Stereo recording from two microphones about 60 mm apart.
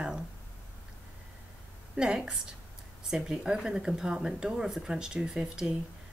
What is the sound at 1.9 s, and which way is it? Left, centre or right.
Speech, centre.